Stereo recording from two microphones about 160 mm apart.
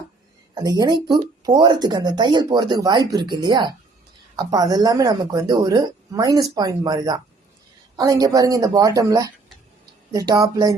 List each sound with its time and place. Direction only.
0.5 s speech: 25° right (ahead or behind)